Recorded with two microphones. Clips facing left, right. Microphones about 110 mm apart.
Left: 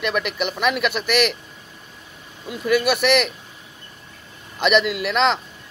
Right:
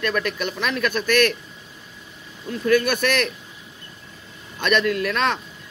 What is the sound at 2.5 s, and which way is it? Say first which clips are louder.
Speech: even; 10° left (ahead or behind).